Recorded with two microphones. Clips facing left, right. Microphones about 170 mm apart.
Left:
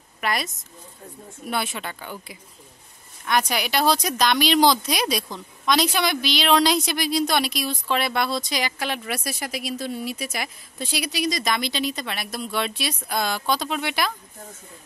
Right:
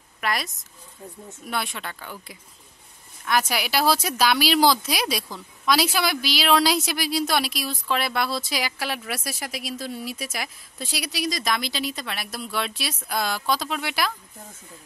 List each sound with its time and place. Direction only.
0.2 s speech: centre (ahead or behind)